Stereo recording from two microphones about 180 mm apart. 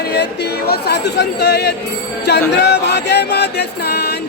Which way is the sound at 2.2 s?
70° left (ahead or behind).